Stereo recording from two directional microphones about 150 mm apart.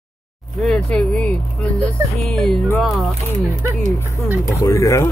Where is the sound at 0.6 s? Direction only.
5° left (ahead or behind).